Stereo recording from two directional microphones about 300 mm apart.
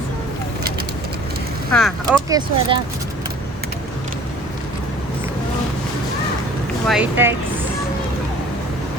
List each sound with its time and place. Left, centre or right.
1.7 s speech: centre
2.3 s speech: centre
6.8 s speech: centre